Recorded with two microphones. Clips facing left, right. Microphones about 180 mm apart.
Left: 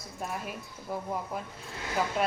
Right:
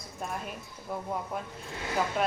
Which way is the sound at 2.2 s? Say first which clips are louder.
Even; centre (ahead or behind).